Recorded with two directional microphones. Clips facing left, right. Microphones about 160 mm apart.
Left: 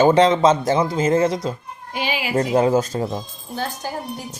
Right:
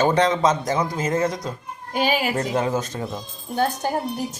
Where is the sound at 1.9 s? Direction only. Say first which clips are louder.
Right 4 dB; 45° right (ahead or behind).